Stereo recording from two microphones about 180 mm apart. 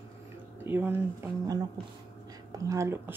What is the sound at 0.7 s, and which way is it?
Speech, 10° right (ahead or behind).